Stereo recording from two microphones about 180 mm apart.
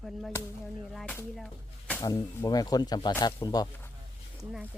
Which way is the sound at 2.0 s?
20° left (ahead or behind).